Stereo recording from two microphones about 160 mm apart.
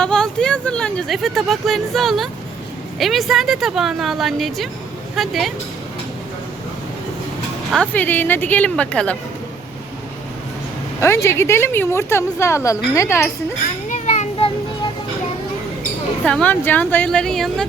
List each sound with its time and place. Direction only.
0.0 s speech: 5° left (ahead or behind)
7.8 s a woman's voice: 10° left (ahead or behind)
11.0 s a woman's voice: 15° left (ahead or behind)
13.8 s children playing: 50° left (ahead or behind)
16.2 s a woman's voice: 5° left (ahead or behind)